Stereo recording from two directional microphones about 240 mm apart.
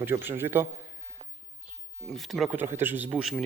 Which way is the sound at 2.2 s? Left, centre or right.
Centre.